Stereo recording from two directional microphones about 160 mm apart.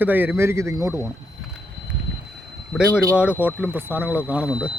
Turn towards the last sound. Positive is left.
turn(degrees=-10)  # may be behind; listen again after turning